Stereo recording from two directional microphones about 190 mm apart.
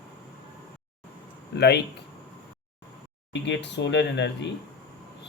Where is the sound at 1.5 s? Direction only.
60° left (ahead or behind).